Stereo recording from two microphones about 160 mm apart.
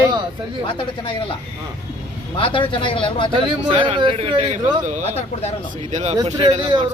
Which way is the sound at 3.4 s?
30° right (ahead or behind).